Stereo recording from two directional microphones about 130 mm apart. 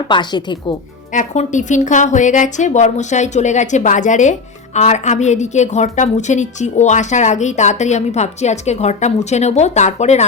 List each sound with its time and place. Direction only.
0.1 s a woman's voice: 35° left (ahead or behind)
1.1 s a woman's voice: 70° left (ahead or behind)